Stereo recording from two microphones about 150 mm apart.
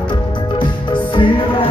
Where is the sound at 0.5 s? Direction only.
35° left (ahead or behind).